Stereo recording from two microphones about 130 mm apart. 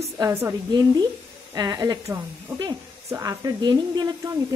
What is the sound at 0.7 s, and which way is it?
Speech, 30° right (ahead or behind).